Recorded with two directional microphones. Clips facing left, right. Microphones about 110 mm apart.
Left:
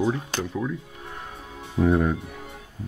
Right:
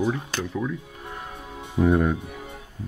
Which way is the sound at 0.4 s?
5° left (ahead or behind).